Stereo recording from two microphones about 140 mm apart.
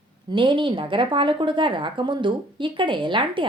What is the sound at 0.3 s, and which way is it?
Speech, 35° right (ahead or behind).